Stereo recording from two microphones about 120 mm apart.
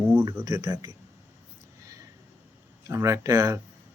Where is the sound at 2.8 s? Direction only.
25° right (ahead or behind).